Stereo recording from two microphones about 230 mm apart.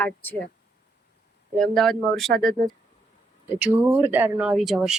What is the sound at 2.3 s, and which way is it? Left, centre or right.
Speech, right.